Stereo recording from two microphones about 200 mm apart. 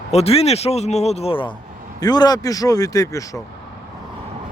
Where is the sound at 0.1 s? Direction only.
30° left (ahead or behind).